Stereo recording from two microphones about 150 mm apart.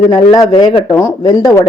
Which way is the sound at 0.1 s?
25° left (ahead or behind).